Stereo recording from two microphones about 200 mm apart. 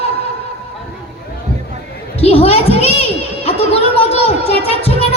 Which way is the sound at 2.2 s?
30° left (ahead or behind).